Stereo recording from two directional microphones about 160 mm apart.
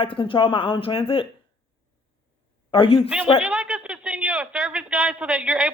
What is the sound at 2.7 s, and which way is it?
Speech, 35° left (ahead or behind).